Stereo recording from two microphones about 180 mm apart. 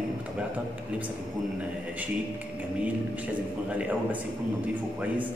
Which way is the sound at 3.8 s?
10° right (ahead or behind).